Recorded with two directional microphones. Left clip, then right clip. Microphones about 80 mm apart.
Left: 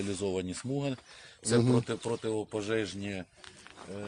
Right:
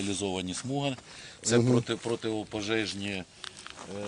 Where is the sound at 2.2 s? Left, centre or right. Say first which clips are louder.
Even; left.